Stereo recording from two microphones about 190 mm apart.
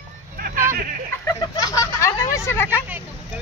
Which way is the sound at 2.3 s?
15° left (ahead or behind).